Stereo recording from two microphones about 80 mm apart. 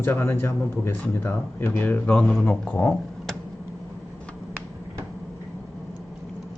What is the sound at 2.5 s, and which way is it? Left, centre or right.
Speech, centre.